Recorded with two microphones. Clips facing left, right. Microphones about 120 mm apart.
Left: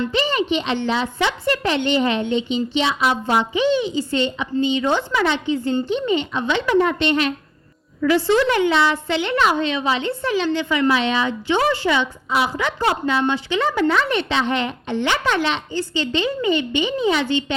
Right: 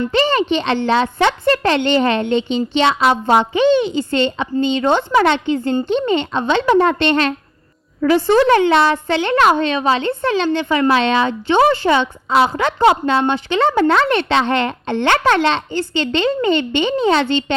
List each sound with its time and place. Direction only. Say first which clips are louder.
0.1 s a child's voice: right 4 dB; 65° right (ahead or behind)
5.9 s a woman's voice: right 4 dB; 65° right (ahead or behind)
8.0 s a woman's voice: right 4 dB; 55° right (ahead or behind)
10.9 s a woman's voice: right 5 dB; 70° right (ahead or behind)